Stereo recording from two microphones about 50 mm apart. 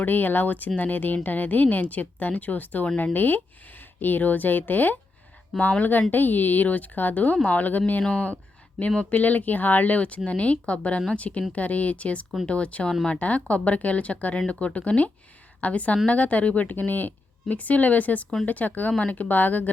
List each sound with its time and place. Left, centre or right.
0.0 s speech: left